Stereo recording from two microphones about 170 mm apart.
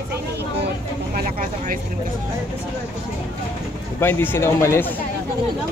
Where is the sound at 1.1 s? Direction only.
50° right (ahead or behind).